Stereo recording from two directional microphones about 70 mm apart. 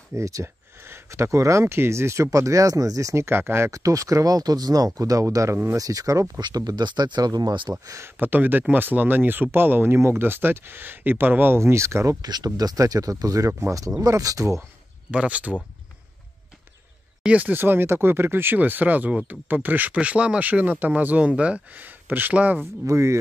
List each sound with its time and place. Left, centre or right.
0.1 s speech: right
0.8 s speech: right
2.3 s speech: right
3.3 s speech: right
3.7 s speech: right
5.8 s speech: right
6.4 s speech: right
8.2 s speech: right
12.2 s speech: right
12.4 s speech: right
13.5 s speech: right
15.0 s speech: centre
17.2 s speech: right
22.8 s speech: right